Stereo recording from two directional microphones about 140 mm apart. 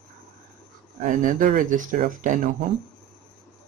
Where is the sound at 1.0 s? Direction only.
65° right (ahead or behind).